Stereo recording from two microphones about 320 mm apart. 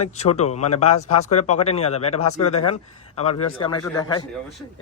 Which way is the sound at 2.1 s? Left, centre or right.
Left.